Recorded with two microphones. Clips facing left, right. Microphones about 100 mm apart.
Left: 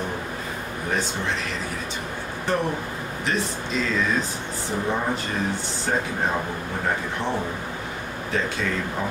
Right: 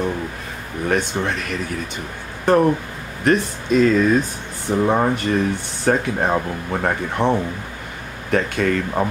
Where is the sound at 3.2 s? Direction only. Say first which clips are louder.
Right 9 dB; 50° right (ahead or behind).